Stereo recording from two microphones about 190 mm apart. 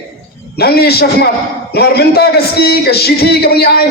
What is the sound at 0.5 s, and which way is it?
A man's voice, 55° left (ahead or behind).